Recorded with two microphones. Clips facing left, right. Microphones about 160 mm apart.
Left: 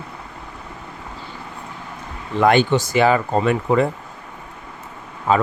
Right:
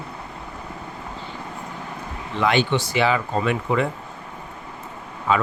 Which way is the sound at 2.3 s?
45° left (ahead or behind).